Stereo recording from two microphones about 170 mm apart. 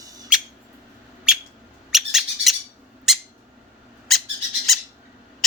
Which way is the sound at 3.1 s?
Centre (ahead or behind).